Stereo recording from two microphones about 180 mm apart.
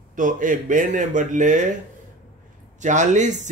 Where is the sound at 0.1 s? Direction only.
45° right (ahead or behind).